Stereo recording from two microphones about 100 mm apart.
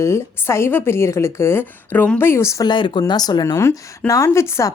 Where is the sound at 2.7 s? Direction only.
50° left (ahead or behind).